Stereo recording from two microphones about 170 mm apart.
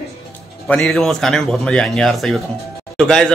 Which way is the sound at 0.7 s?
Centre (ahead or behind).